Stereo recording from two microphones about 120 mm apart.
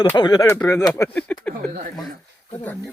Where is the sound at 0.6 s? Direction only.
30° left (ahead or behind).